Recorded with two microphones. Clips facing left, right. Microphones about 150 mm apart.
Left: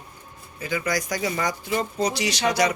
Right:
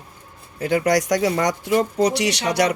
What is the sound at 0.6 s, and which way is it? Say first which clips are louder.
Speech: right 8 dB; 70° right (ahead or behind).